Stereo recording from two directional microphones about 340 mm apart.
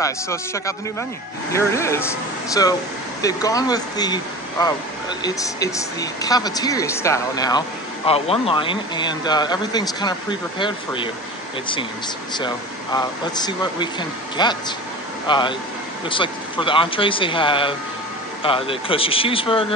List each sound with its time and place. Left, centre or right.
0.0 s speech: centre
12.4 s speech: centre